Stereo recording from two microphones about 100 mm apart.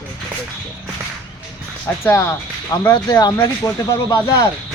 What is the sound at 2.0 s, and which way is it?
Speech, 25° left (ahead or behind).